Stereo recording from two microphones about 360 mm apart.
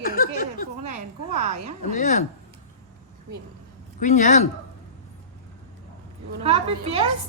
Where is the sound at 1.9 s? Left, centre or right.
Left.